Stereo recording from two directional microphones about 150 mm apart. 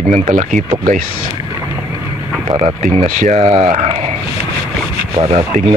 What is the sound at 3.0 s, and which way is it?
Speech, 60° right (ahead or behind).